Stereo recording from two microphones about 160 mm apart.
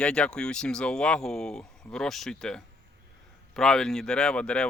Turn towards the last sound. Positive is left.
turn(degrees=5)  # may be behind; listen again after turning